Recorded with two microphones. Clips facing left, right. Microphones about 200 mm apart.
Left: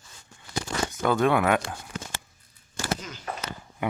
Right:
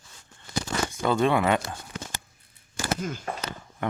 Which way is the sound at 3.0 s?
50° right (ahead or behind).